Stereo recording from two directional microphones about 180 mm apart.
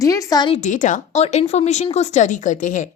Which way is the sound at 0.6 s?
45° left (ahead or behind).